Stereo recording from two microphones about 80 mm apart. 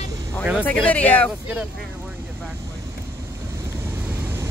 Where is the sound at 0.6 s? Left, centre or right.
Centre.